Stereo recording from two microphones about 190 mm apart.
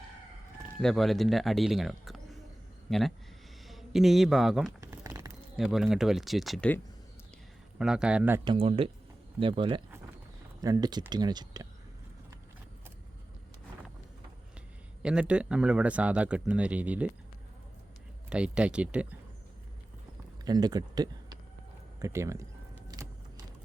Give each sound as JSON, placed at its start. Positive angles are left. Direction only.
{"t": 0.8, "sound": "speech", "side_deg": 0}
{"t": 4.9, "sound": "a sound", "side_deg": -15}
{"t": 5.5, "sound": "speech", "side_deg": 0}
{"t": 7.8, "sound": "speech", "side_deg": -5}
{"t": 8.4, "sound": "speech", "side_deg": -30}
{"t": 15.0, "sound": "speech", "side_deg": -5}
{"t": 18.3, "sound": "speech", "side_deg": -5}
{"t": 20.4, "sound": "speech", "side_deg": -20}
{"t": 23.0, "sound": "vehicle", "side_deg": -20}